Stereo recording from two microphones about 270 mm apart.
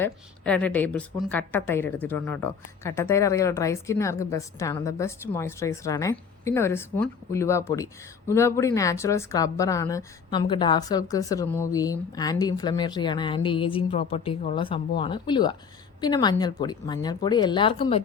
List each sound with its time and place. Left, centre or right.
0.0 s a woman's voice: centre